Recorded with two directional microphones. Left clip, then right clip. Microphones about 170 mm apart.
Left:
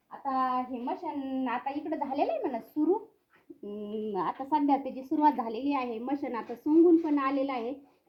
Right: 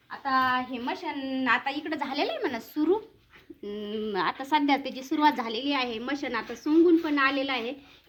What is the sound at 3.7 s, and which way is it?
Speech, 15° left (ahead or behind).